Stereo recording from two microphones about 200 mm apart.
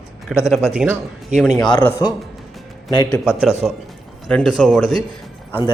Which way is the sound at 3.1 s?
Centre (ahead or behind).